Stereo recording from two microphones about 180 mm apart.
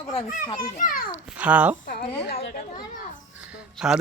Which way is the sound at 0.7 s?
50° left (ahead or behind).